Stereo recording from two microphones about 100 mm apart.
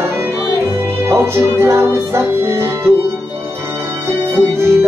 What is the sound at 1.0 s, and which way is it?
Music, 25° right (ahead or behind).